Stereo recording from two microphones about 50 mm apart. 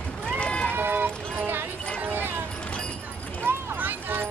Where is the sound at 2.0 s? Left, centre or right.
Right.